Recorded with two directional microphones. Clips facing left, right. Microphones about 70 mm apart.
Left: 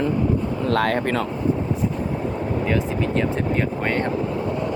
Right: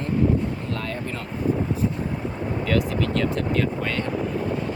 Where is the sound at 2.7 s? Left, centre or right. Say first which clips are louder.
Right 2 dB; left.